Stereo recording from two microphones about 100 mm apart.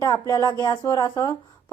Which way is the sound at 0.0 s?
40° left (ahead or behind).